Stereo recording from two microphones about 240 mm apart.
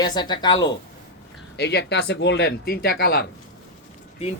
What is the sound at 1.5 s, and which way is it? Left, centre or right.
Speech, left.